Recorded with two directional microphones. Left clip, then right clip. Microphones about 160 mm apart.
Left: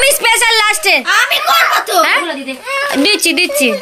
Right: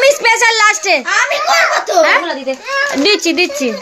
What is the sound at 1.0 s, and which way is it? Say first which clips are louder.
Speech: left 2 dB; 55° right (ahead or behind).